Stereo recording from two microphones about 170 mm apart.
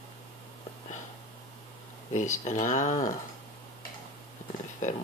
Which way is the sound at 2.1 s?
45° left (ahead or behind).